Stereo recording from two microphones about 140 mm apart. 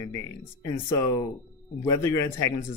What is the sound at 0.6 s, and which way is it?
Speech, 25° left (ahead or behind).